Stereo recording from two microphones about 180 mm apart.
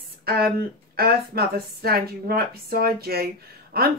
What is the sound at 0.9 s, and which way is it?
A woman's voice, 60° right (ahead or behind).